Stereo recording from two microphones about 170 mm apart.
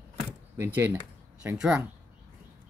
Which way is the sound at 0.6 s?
10° right (ahead or behind).